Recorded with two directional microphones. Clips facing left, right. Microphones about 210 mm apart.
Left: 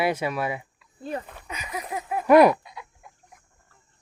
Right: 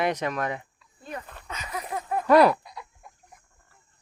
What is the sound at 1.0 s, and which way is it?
Speech, 30° left (ahead or behind).